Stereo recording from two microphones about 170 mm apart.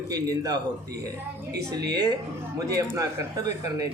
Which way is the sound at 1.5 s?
75° right (ahead or behind).